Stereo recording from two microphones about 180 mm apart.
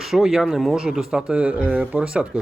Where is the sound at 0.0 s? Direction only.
Centre (ahead or behind).